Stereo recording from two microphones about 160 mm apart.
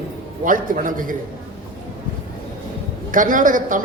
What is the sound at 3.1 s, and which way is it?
Speech, 55° right (ahead or behind).